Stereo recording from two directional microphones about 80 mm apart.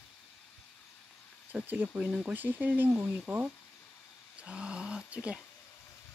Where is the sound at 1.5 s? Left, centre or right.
Right.